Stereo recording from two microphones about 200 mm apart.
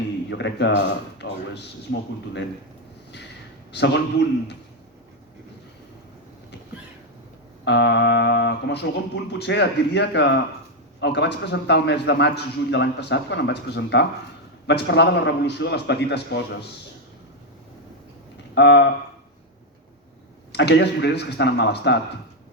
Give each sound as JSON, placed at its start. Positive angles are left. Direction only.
{"t": 0.3, "sound": "a man's voice", "side_deg": 60}
{"t": 3.7, "sound": "a man's voice", "side_deg": 60}
{"t": 7.6, "sound": "a man's voice", "side_deg": 60}
{"t": 18.5, "sound": "a man's voice", "side_deg": 60}
{"t": 20.5, "sound": "a man's voice", "side_deg": 60}